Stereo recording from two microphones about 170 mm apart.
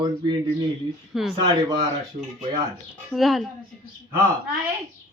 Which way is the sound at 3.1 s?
Centre (ahead or behind).